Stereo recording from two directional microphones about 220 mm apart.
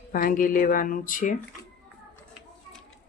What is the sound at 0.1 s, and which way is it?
Speech, 40° left (ahead or behind).